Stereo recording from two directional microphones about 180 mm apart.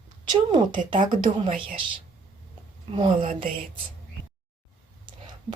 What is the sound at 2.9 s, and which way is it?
Speech, 30° right (ahead or behind).